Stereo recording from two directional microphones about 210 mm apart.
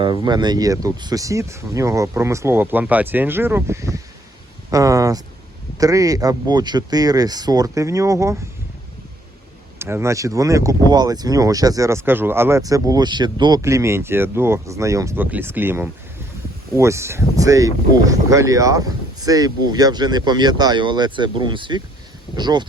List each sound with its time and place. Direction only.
0.0 s speech: 20° right (ahead or behind)
9.7 s speech: 10° right (ahead or behind)